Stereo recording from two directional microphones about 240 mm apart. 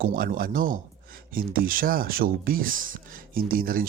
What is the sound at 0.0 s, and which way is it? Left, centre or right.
Speech, right.